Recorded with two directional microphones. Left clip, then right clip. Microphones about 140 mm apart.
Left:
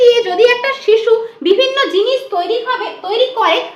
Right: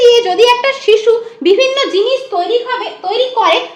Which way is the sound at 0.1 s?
40° right (ahead or behind).